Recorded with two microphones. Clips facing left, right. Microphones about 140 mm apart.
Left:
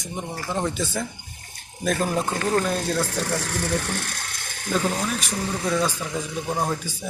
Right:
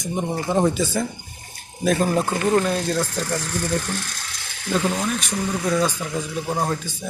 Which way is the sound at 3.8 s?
60° left (ahead or behind).